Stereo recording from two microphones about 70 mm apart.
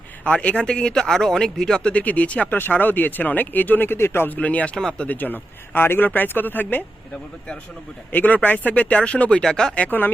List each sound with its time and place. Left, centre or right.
0.3 s speech: centre; by 4.4 s left
4.4 s speech: centre
5.0 s speech: left
8.1 s speech: left
9.7 s speech: left